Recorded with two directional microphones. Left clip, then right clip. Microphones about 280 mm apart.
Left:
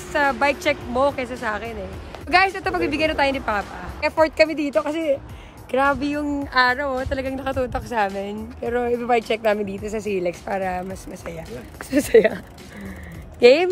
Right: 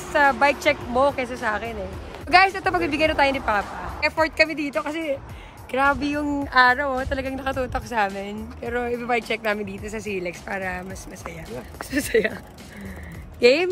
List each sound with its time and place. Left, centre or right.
0.1 s speech: centre
13.4 s speech: centre